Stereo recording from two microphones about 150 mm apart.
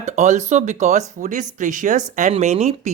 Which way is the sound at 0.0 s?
50° right (ahead or behind).